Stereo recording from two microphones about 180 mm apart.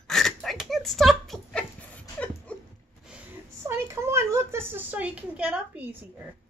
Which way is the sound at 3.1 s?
10° right (ahead or behind).